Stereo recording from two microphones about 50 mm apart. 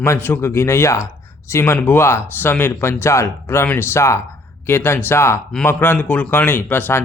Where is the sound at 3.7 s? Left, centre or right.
Left.